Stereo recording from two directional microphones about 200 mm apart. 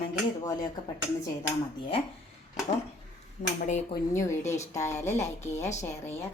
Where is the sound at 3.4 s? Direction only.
35° left (ahead or behind).